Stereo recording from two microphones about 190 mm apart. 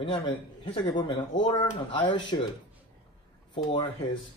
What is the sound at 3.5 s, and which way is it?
Speech, 25° left (ahead or behind).